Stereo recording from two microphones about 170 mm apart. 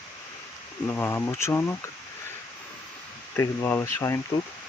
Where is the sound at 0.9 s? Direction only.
15° left (ahead or behind).